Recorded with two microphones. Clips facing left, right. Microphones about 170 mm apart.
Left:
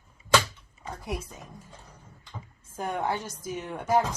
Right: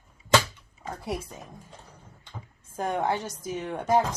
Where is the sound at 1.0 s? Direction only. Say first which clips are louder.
Right 2 dB; 35° right (ahead or behind).